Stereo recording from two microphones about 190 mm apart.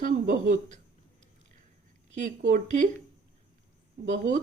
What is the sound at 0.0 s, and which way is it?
Speech, 45° right (ahead or behind).